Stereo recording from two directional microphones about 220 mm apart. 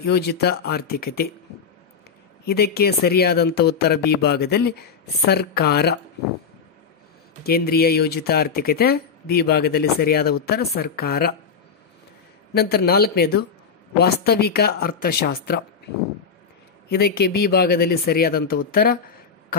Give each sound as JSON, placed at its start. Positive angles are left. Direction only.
{"t": 0.0, "sound": "speech", "side_deg": 45}
{"t": 2.4, "sound": "speech", "side_deg": 45}
{"t": 7.4, "sound": "speech", "side_deg": 45}
{"t": 12.5, "sound": "speech", "side_deg": 45}
{"t": 16.9, "sound": "speech", "side_deg": 45}